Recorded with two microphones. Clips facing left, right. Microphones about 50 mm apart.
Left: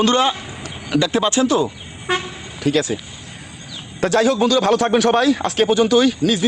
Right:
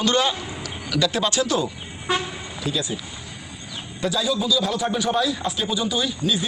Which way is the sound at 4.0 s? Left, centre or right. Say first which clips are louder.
Left 8 dB; left.